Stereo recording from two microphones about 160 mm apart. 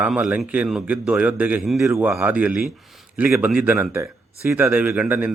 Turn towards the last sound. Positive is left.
turn(degrees=-10)  # may be behind; listen again after turning